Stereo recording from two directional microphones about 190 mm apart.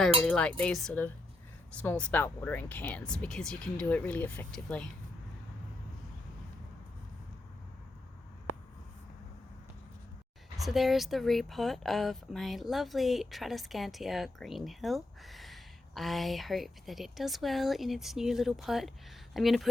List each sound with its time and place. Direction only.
0.2 s speech: 5° left (ahead or behind)
10.6 s speech: centre (ahead or behind)